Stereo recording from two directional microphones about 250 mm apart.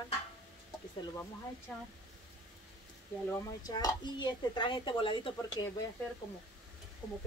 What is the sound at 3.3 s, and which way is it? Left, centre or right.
Speech, centre.